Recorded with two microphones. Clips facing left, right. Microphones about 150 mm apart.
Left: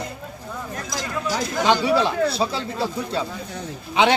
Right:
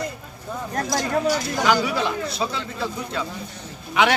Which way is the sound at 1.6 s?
30° left (ahead or behind).